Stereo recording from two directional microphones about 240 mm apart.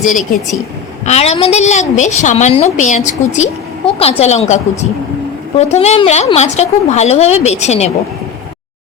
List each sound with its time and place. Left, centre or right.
0.0 s a woman's voice: left